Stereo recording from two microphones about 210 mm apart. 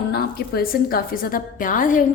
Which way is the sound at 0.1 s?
45° left (ahead or behind).